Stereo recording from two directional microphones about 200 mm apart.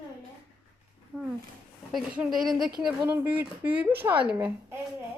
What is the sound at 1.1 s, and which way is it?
A woman's voice, 5° left (ahead or behind).